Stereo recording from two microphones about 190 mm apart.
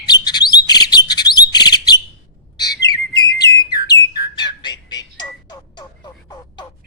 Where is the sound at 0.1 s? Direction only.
20° left (ahead or behind).